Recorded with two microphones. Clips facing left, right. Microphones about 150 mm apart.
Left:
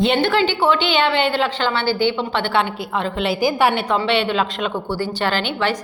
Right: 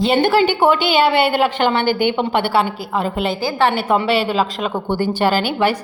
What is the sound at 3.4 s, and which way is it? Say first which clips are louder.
Speech: left 1 dB; 15° left (ahead or behind).